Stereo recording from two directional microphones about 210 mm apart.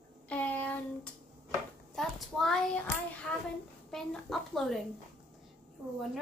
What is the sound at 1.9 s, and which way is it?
A woman's voice, centre (ahead or behind).